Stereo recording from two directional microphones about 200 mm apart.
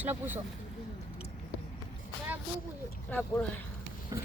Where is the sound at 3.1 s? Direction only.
10° left (ahead or behind).